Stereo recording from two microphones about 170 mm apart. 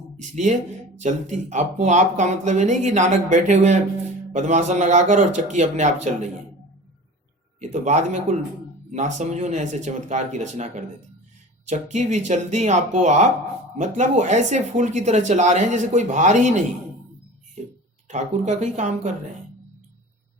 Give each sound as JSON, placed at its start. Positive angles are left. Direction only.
{"t": 0.2, "sound": "speech", "side_deg": -45}
{"t": 7.6, "sound": "speech", "side_deg": -45}
{"t": 18.1, "sound": "speech", "side_deg": -45}